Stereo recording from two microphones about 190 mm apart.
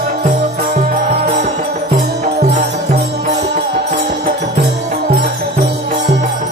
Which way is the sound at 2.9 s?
35° right (ahead or behind).